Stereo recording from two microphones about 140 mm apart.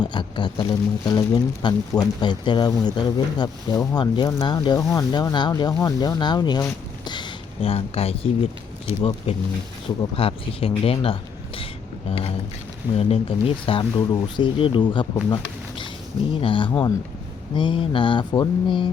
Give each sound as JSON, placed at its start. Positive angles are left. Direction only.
{"t": 0.0, "sound": "speech", "side_deg": 35}
{"t": 13.0, "sound": "speech", "side_deg": 45}
{"t": 16.3, "sound": "speech", "side_deg": 40}